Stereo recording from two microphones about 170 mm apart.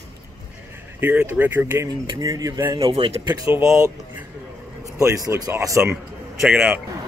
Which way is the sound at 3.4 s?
15° right (ahead or behind).